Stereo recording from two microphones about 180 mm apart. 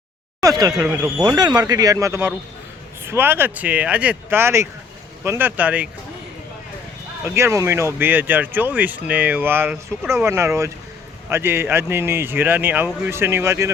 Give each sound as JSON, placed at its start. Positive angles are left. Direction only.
{"t": 0.6, "sound": "speech", "side_deg": -20}
{"t": 7.3, "sound": "speech", "side_deg": -15}